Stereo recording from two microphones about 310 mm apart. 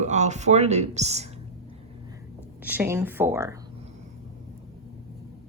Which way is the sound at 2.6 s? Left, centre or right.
Centre.